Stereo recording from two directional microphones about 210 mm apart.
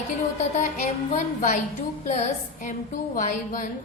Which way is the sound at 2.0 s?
35° left (ahead or behind).